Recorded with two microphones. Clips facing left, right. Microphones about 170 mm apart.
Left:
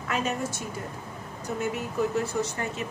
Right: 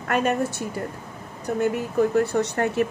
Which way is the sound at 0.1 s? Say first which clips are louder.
Right 7 dB; 60° right (ahead or behind).